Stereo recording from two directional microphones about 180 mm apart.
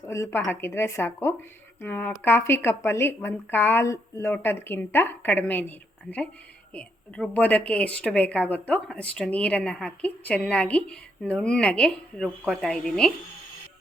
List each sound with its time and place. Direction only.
0.1 s a woman's voice: 15° left (ahead or behind)